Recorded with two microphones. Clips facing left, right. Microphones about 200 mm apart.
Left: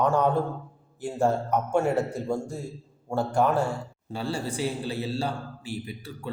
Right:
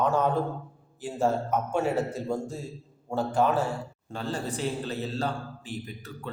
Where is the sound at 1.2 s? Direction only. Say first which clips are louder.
Left 1 dB; 15° left (ahead or behind).